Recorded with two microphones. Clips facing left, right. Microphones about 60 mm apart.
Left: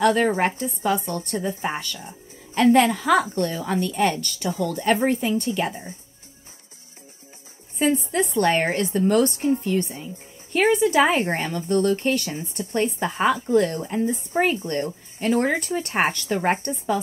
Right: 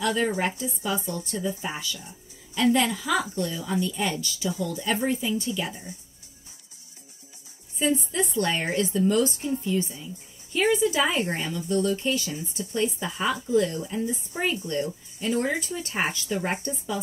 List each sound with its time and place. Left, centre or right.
0.0 s a woman's voice: left
7.8 s a woman's voice: left